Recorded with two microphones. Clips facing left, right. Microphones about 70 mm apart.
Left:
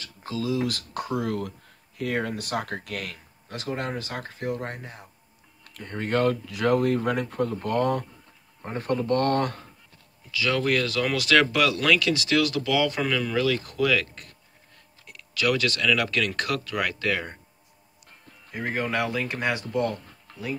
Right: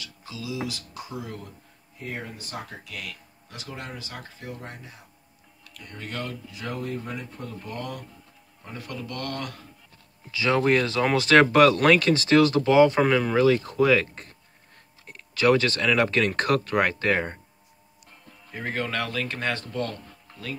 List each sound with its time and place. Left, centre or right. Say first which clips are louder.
0.0 s speech: left 7 dB; left
5.6 s speech: left 7 dB; left
6.4 s speech: left 11 dB; left
7.4 s speech: left 11 dB; left
8.6 s speech: left 11 dB; left
10.3 s speech: right 3 dB; right
18.5 s speech: left 2 dB; centre